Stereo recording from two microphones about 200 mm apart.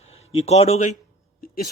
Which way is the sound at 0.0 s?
30° left (ahead or behind).